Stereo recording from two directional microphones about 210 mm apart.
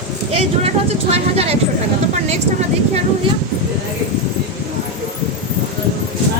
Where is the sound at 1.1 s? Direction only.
30° right (ahead or behind).